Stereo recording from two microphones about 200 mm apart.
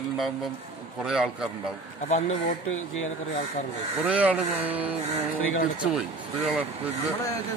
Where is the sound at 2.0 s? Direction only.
35° left (ahead or behind).